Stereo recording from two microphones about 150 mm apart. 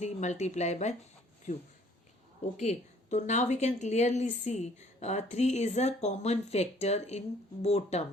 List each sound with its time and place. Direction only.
0.0 s speech: 50° left (ahead or behind)
2.6 s speech: 50° left (ahead or behind)